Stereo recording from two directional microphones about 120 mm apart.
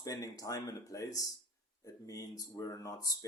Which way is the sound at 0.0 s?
30° left (ahead or behind).